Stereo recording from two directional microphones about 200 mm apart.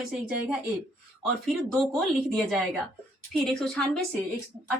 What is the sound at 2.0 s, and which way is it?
Speech, centre (ahead or behind).